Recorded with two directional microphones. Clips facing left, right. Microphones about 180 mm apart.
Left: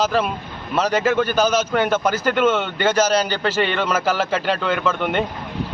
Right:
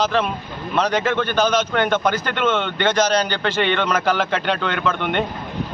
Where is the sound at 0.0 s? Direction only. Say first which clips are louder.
Even; 5° left (ahead or behind).